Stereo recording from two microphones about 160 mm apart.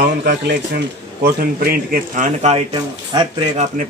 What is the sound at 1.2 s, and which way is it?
A man's voice, 70° right (ahead or behind).